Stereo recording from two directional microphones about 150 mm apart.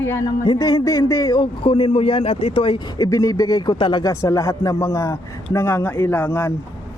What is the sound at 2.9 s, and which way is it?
Speech, 25° left (ahead or behind).